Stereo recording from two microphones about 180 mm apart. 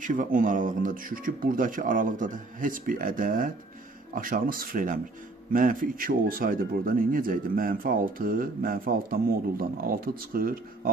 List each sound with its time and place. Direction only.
0.0 s speech: 45° right (ahead or behind)